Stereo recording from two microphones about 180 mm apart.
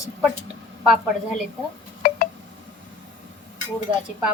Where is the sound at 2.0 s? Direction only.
60° left (ahead or behind).